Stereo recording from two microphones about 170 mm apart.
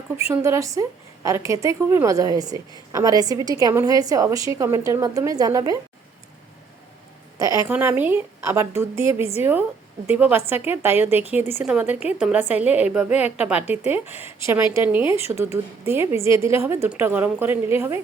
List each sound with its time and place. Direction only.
0.3 s a woman's voice: 15° right (ahead or behind)
7.3 s a woman's voice: 20° right (ahead or behind)